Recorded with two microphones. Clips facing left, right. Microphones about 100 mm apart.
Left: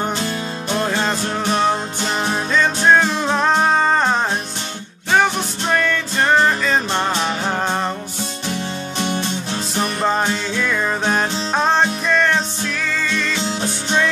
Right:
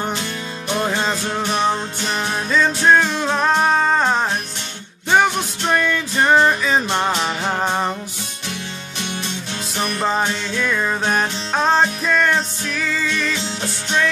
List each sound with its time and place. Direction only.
0.7 s music: 5° right (ahead or behind)
8.9 s music: 40° left (ahead or behind)
10.0 s music: centre (ahead or behind)